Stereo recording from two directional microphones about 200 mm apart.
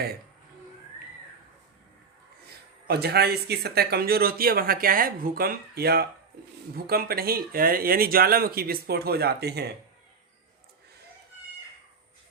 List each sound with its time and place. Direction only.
2.8 s speech: 50° right (ahead or behind)